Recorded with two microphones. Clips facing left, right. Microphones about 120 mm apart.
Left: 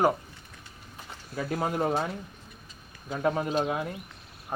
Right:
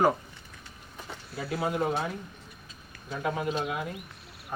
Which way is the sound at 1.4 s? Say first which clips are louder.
Left 1 dB; 45° left (ahead or behind).